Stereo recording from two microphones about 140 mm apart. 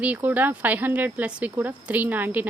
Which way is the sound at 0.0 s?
10° right (ahead or behind).